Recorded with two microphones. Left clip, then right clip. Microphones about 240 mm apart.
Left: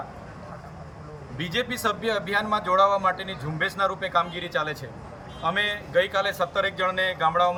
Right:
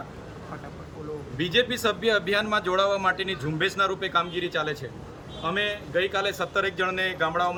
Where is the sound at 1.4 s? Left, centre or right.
Centre.